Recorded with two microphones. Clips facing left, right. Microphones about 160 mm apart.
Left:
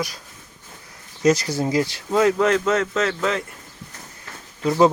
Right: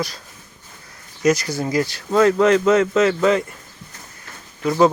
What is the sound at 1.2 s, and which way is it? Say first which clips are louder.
Speech: even; 30° left (ahead or behind).